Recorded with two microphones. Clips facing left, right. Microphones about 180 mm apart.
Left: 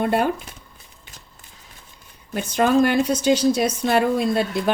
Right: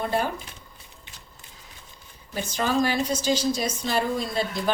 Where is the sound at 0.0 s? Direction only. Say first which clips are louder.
Left 6 dB; 60° left (ahead or behind).